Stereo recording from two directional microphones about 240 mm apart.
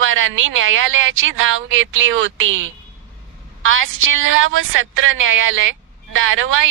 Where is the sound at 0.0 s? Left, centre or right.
Right.